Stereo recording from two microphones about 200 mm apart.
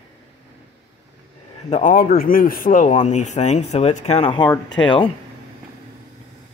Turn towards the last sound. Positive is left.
turn(degrees=25)  # may be behind; listen again after turning